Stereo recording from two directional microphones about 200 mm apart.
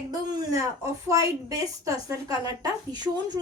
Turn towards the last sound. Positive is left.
turn(degrees=-20)  # may be behind; listen again after turning